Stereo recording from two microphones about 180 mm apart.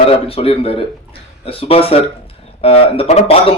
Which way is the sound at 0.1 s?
30° left (ahead or behind).